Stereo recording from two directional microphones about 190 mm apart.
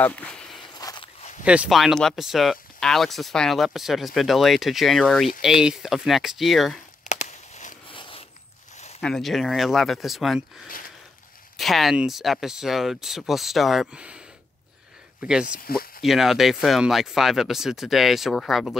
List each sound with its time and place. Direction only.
0.0 s speech: 10° left (ahead or behind)
0.6 s walk: 20° left (ahead or behind)
1.4 s speech: 5° right (ahead or behind)
7.1 s a sound: 35° left (ahead or behind)
7.9 s zipper: 25° left (ahead or behind)
9.0 s speech: centre (ahead or behind)
11.5 s speech: centre (ahead or behind)
15.6 s speech: 50° left (ahead or behind)
16.0 s speech: centre (ahead or behind)